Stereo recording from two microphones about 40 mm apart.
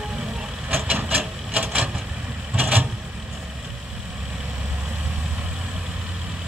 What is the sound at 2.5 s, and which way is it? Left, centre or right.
Vehicle, right.